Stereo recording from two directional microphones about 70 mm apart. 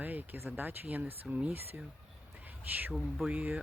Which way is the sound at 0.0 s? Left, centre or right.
Right.